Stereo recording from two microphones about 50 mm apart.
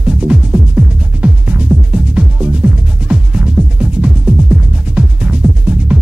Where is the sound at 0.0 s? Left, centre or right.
Right.